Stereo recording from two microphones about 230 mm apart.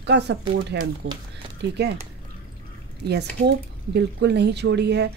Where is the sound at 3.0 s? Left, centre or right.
Right.